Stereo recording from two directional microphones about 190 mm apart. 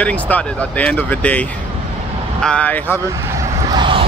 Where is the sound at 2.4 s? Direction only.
5° left (ahead or behind).